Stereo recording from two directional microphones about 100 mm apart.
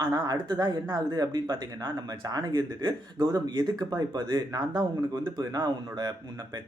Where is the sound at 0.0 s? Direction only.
45° right (ahead or behind).